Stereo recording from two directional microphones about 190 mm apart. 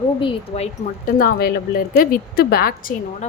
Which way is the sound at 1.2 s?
55° left (ahead or behind).